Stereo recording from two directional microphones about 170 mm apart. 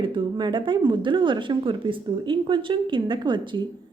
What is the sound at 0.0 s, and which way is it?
A woman's voice, 30° right (ahead or behind).